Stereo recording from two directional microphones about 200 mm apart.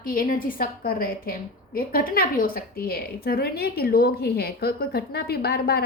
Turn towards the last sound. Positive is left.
turn(degrees=50)  # may be behind; listen again after turning